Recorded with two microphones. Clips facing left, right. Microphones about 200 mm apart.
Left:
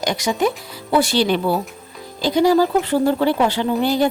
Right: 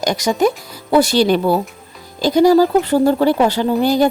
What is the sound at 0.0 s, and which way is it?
A woman's voice, 40° right (ahead or behind).